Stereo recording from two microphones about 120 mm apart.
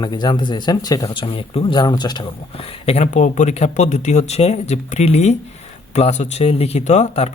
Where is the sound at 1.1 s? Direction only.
45° left (ahead or behind).